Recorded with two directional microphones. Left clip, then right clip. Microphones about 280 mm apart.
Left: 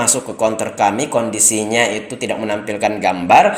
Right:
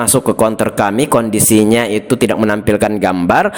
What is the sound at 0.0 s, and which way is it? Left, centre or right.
Speech, right.